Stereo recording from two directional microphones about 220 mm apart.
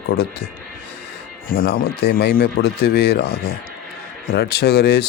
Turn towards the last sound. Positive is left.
turn(degrees=50)  # may be behind; listen again after turning